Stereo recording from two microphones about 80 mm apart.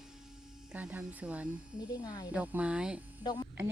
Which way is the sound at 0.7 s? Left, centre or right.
Centre.